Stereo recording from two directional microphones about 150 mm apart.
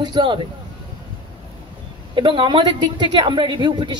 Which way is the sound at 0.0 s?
30° right (ahead or behind).